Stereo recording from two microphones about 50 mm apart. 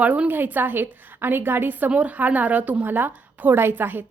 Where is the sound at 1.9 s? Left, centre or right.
Right.